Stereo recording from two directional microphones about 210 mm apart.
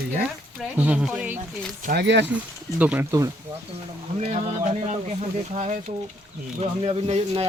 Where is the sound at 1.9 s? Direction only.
55° right (ahead or behind).